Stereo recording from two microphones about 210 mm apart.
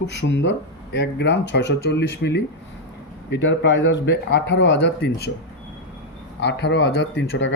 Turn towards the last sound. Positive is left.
turn(degrees=60)  # may be behind; listen again after turning